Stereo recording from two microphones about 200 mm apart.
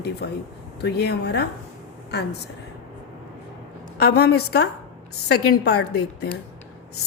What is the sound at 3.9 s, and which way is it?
A woman's voice, 55° left (ahead or behind).